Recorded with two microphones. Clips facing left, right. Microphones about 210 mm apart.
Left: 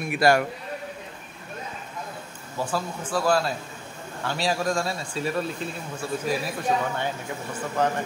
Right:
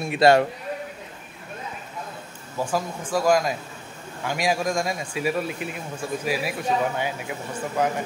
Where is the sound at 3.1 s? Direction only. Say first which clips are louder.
Right 3 dB; 15° right (ahead or behind).